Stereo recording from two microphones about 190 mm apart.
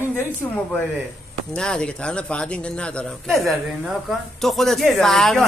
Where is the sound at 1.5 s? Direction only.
5° left (ahead or behind).